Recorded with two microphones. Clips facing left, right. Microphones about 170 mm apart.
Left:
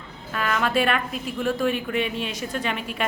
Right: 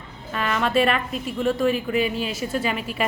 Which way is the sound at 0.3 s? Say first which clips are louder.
Right 2 dB; centre (ahead or behind).